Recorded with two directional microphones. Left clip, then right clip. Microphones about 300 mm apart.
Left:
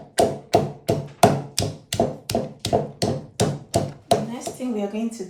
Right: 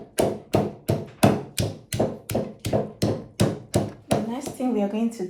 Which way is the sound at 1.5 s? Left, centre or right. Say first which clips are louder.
Left 3 dB; centre.